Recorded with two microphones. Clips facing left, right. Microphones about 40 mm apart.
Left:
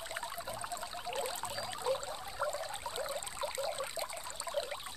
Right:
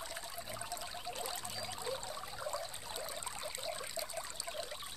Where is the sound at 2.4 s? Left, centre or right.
Left.